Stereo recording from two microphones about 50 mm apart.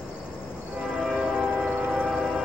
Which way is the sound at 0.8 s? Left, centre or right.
Centre.